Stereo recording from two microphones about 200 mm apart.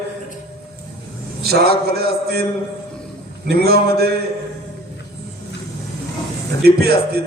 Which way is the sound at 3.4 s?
50° right (ahead or behind).